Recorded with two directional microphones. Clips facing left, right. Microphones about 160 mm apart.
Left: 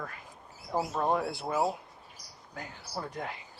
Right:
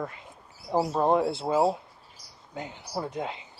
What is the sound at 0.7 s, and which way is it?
Speech, 35° right (ahead or behind).